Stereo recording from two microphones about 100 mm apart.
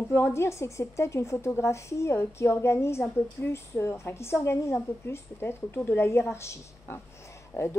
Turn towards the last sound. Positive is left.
turn(degrees=25)  # may be behind; listen again after turning